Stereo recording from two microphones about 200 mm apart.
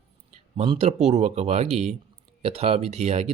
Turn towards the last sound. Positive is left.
turn(degrees=-35)  # may be behind; listen again after turning